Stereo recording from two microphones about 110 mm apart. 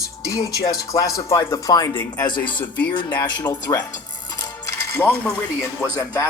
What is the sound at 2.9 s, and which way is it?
Speech, 45° left (ahead or behind).